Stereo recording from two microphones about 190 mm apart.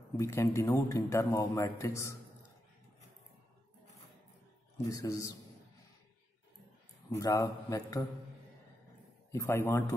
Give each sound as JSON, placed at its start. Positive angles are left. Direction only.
{"t": 0.2, "sound": "a man's voice", "side_deg": 15}
{"t": 4.8, "sound": "a man's voice", "side_deg": 15}
{"t": 7.1, "sound": "a man's voice", "side_deg": 15}
{"t": 9.3, "sound": "a man's voice", "side_deg": 15}